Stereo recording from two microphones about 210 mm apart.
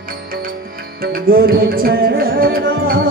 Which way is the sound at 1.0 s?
45° right (ahead or behind).